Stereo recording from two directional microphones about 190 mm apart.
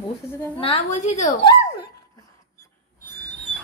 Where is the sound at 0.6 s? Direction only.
35° left (ahead or behind).